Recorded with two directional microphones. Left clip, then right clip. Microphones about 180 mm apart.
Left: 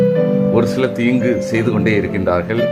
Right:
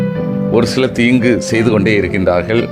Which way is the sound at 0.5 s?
20° right (ahead or behind).